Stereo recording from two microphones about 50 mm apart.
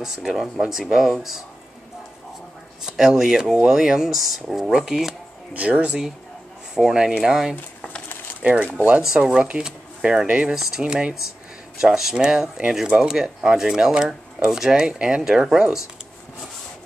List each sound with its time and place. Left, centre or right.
0.0 s speech: centre
2.8 s speech: centre
5.5 s speech: right
6.7 s speech: centre
8.7 s speech: right
10.2 s speech: right
10.5 s speech: centre
10.8 s speech: right
11.8 s speech: centre
15.2 s speech: centre